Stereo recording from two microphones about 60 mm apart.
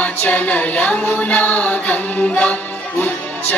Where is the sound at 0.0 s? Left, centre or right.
Left.